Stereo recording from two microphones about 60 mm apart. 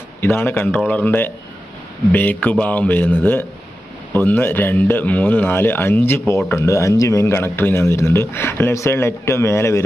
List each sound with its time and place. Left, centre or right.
0.2 s speech: left
7.8 s a man's voice: left